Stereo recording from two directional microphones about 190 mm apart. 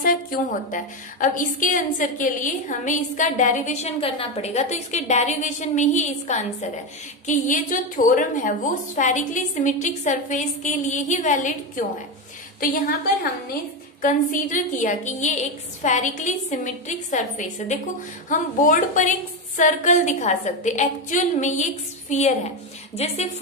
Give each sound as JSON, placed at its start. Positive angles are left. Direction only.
{"t": 0.0, "sound": "a woman's voice", "side_deg": 50}
{"t": 14.0, "sound": "a woman's voice", "side_deg": 45}